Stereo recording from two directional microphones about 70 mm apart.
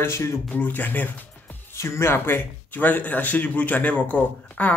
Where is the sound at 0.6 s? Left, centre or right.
Left.